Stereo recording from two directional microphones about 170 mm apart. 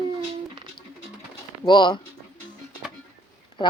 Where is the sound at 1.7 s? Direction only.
25° left (ahead or behind).